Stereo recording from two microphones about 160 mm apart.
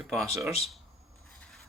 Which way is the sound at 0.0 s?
Centre (ahead or behind).